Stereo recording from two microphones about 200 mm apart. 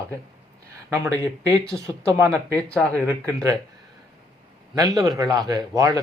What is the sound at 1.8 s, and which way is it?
Speech, 5° left (ahead or behind).